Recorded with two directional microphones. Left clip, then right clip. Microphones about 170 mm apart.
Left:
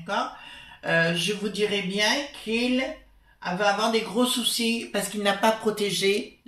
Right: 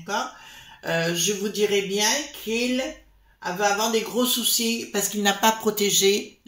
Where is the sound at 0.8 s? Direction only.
45° right (ahead or behind).